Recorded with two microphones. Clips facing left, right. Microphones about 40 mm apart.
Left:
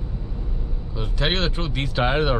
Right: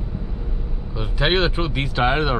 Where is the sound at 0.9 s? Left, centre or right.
Centre.